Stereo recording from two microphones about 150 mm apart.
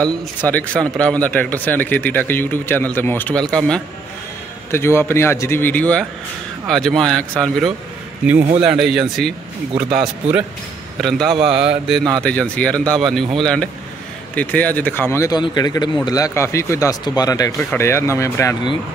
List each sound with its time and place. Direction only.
0.0 s speech: 10° left (ahead or behind)
4.6 s speech: 15° left (ahead or behind); by 9.3 s centre (ahead or behind)
11.0 s speech: centre (ahead or behind); by 18.7 s 20° left (ahead or behind)